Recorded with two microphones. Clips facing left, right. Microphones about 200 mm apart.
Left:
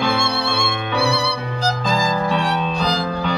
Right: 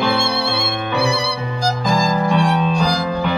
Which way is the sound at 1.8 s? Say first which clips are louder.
Right 3 dB; 15° right (ahead or behind).